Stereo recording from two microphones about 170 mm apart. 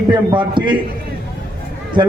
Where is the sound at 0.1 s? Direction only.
25° right (ahead or behind).